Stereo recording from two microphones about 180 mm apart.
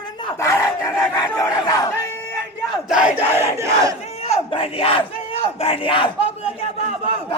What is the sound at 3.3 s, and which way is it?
Battle cry, 15° right (ahead or behind).